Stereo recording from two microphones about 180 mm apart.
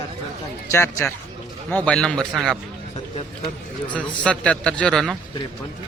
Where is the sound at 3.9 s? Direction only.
5° left (ahead or behind).